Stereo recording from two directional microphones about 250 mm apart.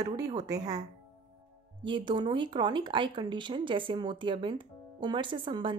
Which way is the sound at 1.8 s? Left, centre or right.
Centre.